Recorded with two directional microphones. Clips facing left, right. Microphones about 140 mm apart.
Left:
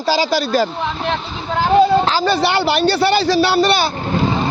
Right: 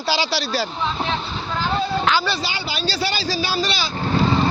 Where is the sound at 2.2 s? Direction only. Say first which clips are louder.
Left 10 dB; 60° left (ahead or behind).